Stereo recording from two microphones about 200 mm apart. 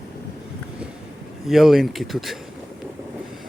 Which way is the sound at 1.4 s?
Centre (ahead or behind).